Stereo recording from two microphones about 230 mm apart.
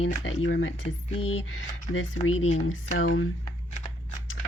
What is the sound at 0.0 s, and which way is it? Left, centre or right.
Speech, left.